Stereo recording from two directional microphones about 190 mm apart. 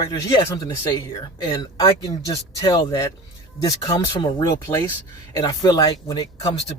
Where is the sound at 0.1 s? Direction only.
20° left (ahead or behind).